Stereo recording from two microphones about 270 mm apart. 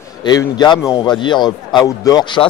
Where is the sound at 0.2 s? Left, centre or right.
Centre.